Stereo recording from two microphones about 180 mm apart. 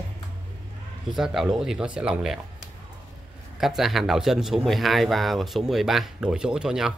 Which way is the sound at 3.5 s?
Centre (ahead or behind).